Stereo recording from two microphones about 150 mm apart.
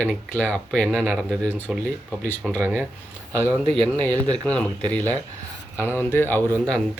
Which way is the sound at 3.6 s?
35° right (ahead or behind).